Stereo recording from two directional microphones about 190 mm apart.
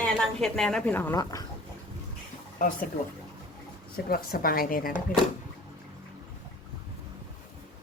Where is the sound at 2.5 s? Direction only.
45° left (ahead or behind).